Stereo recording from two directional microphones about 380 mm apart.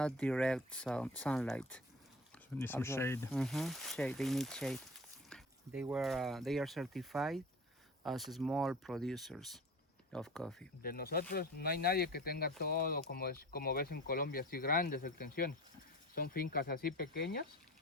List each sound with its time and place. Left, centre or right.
0.0 s speech: centre
10.8 s speech: left